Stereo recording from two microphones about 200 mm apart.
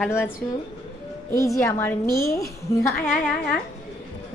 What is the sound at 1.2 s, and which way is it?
Speech, 15° left (ahead or behind).